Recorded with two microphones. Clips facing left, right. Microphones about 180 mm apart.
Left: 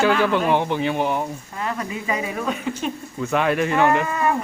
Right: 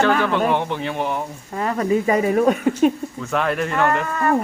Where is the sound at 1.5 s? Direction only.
40° right (ahead or behind).